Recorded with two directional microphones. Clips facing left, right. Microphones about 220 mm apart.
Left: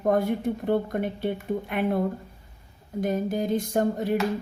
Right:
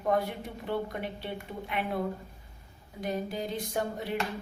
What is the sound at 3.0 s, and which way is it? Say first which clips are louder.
A woman's voice: left 7 dB; 50° left (ahead or behind).